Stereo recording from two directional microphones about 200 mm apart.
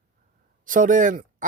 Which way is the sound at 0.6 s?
40° right (ahead or behind).